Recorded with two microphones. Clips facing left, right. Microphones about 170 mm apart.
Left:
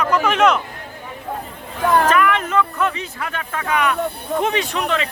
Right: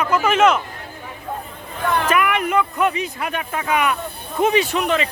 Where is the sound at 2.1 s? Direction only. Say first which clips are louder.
Left 2 dB; 10° right (ahead or behind).